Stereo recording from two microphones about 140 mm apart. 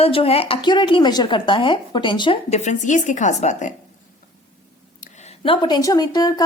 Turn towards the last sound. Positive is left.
turn(degrees=30)  # may be behind; listen again after turning